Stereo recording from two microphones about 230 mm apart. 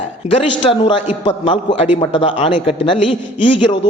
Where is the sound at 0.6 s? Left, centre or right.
Left.